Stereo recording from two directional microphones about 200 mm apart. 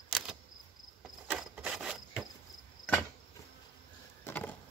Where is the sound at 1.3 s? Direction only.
5° right (ahead or behind).